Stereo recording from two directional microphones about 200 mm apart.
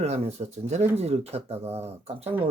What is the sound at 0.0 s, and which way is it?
Speech, 30° right (ahead or behind).